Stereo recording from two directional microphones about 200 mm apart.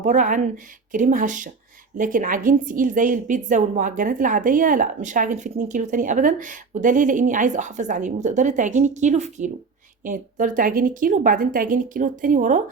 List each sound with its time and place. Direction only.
0.0 s a woman's voice: 40° right (ahead or behind)